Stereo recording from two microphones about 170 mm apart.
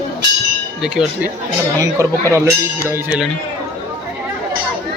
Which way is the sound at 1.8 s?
20° right (ahead or behind).